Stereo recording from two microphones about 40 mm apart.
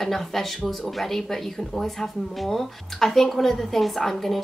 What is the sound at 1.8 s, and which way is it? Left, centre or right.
A woman's voice, centre.